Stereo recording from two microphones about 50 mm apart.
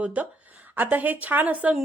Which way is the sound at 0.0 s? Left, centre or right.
Right.